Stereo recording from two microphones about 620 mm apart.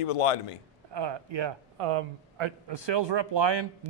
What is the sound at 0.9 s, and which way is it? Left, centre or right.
A man's voice, right.